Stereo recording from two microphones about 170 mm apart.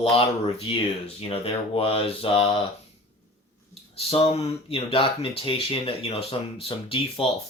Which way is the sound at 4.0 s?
35° left (ahead or behind).